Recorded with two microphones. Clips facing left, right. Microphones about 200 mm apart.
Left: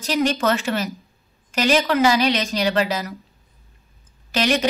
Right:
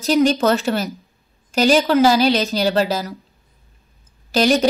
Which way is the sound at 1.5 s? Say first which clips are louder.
Right 4 dB; 35° right (ahead or behind).